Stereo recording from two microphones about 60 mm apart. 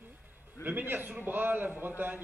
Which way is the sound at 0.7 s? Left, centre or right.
Right.